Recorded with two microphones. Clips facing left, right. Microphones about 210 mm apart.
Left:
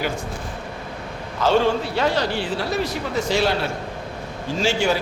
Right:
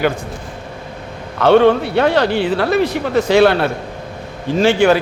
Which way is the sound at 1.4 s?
60° right (ahead or behind).